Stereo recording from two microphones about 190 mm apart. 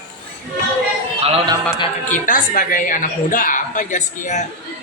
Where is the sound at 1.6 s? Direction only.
20° left (ahead or behind).